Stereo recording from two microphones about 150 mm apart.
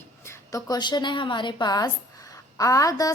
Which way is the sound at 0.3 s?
25° left (ahead or behind).